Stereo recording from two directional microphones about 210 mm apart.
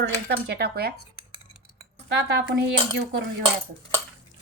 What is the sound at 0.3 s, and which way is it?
Speech, 50° right (ahead or behind).